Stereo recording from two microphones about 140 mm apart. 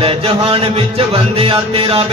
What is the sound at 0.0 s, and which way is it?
Music, 40° right (ahead or behind).